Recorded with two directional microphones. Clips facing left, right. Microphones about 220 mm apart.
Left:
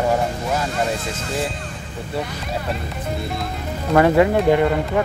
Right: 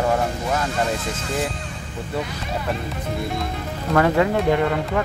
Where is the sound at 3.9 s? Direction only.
10° left (ahead or behind).